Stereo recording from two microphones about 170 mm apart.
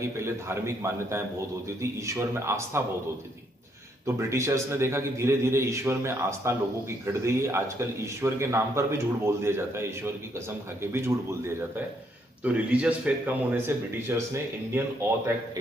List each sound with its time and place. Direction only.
0.0 s speech: 15° right (ahead or behind)
4.0 s speech: 15° right (ahead or behind)